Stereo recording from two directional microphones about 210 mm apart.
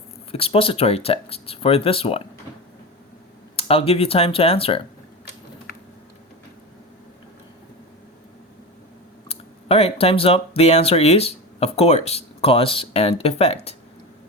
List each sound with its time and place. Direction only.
0.3 s speech: 25° left (ahead or behind)
3.5 s speech: 25° left (ahead or behind)
9.3 s speech: 30° left (ahead or behind)